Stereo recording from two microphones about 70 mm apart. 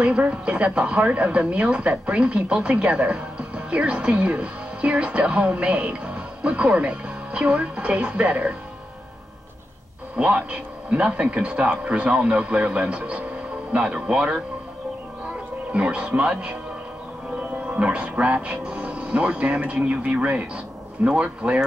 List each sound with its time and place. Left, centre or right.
0.0 s speech: centre
10.1 s speech: centre
15.7 s speech: centre